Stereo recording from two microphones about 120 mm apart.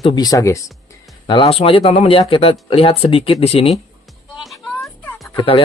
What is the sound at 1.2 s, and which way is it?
Speech, 40° left (ahead or behind).